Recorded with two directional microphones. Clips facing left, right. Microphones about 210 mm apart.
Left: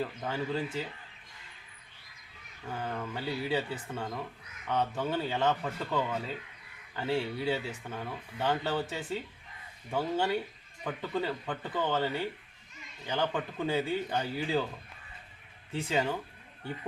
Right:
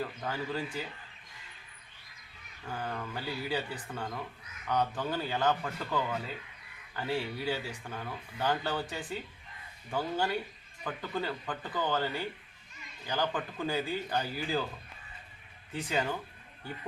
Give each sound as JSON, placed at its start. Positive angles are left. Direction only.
{"t": 0.3, "sound": "speech", "side_deg": 25}
{"t": 2.6, "sound": "speech", "side_deg": 25}
{"t": 15.7, "sound": "speech", "side_deg": 25}